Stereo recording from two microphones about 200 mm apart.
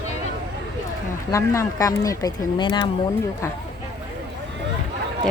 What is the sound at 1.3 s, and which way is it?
Speech, 15° left (ahead or behind).